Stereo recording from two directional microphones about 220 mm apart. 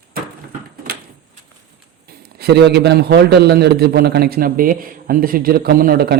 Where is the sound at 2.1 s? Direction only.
45° right (ahead or behind).